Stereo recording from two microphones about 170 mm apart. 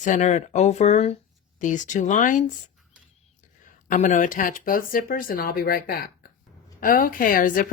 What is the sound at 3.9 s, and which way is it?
Speech, 45° left (ahead or behind).